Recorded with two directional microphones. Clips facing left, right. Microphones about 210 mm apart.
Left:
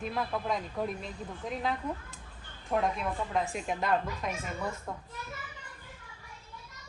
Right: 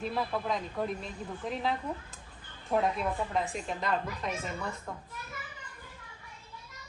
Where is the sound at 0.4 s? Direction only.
Centre (ahead or behind).